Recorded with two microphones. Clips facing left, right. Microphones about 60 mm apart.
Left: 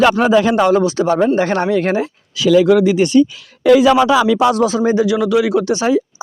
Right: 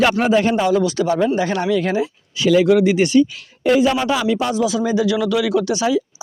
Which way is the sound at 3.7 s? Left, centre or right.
Left.